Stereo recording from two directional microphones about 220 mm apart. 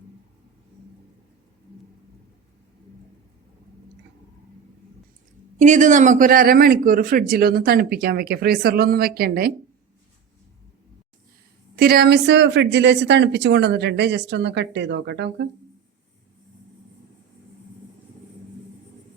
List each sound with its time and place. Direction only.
5.5 s speech: 35° right (ahead or behind)
11.8 s speech: 45° right (ahead or behind)